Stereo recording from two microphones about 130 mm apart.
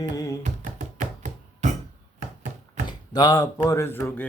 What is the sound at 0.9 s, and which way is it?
Music, 75° right (ahead or behind).